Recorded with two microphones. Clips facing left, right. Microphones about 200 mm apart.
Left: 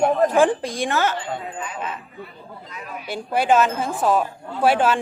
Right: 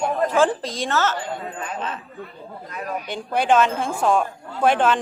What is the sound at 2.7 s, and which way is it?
Speech, 45° right (ahead or behind).